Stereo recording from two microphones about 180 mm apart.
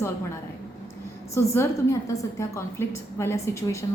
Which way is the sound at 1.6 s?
15° left (ahead or behind).